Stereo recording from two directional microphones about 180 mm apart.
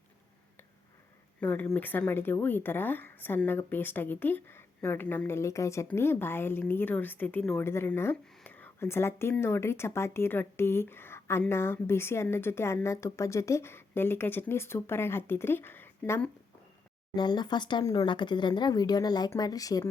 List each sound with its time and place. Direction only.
1.4 s speech: 10° left (ahead or behind)
17.2 s speech: 25° left (ahead or behind)